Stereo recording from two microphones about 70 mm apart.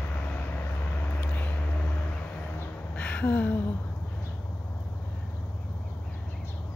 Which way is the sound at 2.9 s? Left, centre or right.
Centre.